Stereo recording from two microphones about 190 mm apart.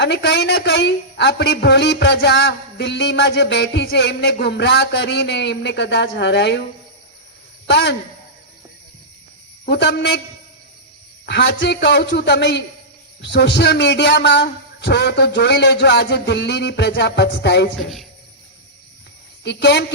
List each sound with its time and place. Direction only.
0.0 s a man's voice: 65° left (ahead or behind)
7.7 s a man's voice: 65° left (ahead or behind)
9.6 s a man's voice: 65° left (ahead or behind)
11.3 s a man's voice: 65° left (ahead or behind)
17.7 s speech: centre (ahead or behind)
19.5 s a man's voice: 65° left (ahead or behind)